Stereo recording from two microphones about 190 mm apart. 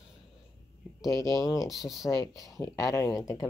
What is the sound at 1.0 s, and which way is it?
Speech, 15° left (ahead or behind).